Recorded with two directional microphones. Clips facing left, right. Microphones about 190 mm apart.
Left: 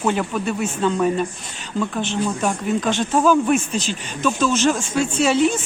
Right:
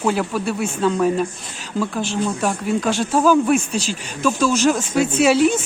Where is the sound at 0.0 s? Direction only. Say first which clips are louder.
Right 1 dB; 5° right (ahead or behind).